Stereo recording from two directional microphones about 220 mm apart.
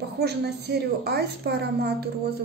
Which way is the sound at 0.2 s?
50° right (ahead or behind).